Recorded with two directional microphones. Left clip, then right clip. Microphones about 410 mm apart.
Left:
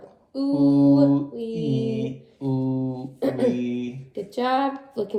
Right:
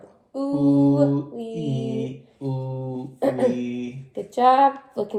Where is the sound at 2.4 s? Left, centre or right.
Centre.